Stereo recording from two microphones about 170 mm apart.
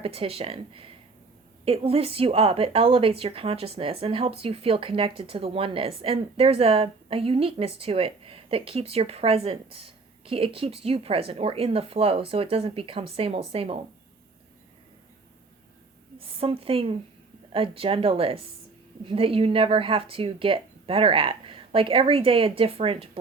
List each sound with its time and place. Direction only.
0.0 s a woman's voice: 35° right (ahead or behind)
16.1 s a woman's voice: 35° right (ahead or behind)